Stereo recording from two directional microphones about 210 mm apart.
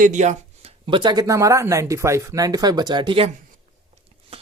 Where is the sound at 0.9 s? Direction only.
20° right (ahead or behind).